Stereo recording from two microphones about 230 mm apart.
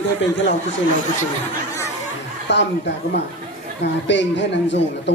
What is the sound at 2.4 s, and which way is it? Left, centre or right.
A man's voice, left.